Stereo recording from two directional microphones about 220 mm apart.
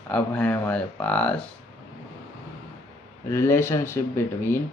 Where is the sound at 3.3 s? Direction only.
10° left (ahead or behind).